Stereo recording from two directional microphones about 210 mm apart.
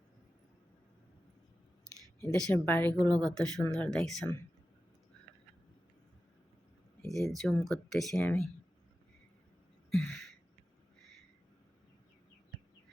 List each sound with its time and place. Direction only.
2.3 s a woman's voice: 5° left (ahead or behind)
2.9 s a woman's voice: 20° right (ahead or behind)
3.2 s speech: 5° left (ahead or behind)
7.0 s speech: centre (ahead or behind)
10.0 s a sound: 5° left (ahead or behind)